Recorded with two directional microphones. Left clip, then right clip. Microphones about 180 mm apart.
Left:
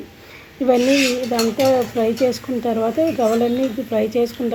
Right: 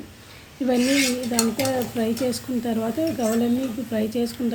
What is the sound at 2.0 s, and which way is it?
Speech, 5° left (ahead or behind).